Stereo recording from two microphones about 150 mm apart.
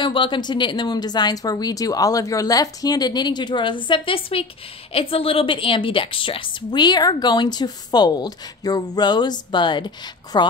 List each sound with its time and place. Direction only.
0.0 s a woman's voice: 35° left (ahead or behind)